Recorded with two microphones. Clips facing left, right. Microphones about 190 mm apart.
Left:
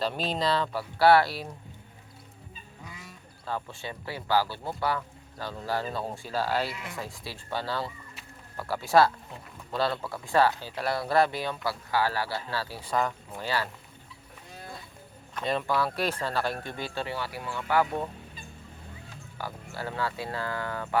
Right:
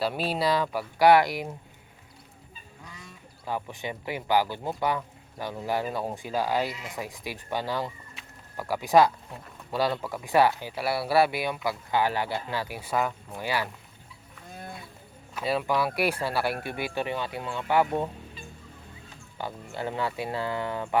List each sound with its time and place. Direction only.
0.0 s speech: 10° right (ahead or behind)
2.8 s goose: 10° left (ahead or behind)
3.4 s speech: 15° right (ahead or behind)
15.4 s speech: 5° right (ahead or behind)
19.4 s speech: 25° right (ahead or behind)